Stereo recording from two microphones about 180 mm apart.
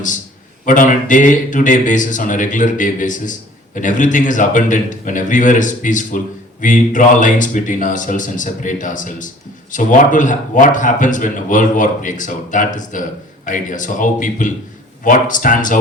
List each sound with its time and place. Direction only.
0.6 s a man's voice: 45° left (ahead or behind)